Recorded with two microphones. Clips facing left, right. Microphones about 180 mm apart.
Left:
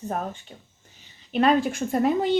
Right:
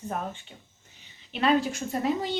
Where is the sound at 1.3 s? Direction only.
45° left (ahead or behind).